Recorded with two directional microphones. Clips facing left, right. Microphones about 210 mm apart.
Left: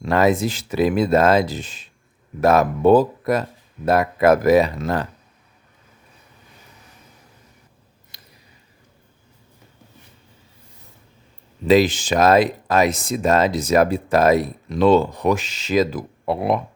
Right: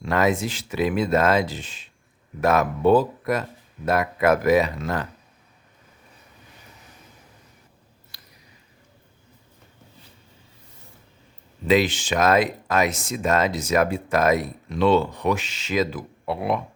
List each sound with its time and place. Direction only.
0.0 s speech: 35° left (ahead or behind)
8.1 s a sound: 20° left (ahead or behind)
11.7 s speech: 40° left (ahead or behind)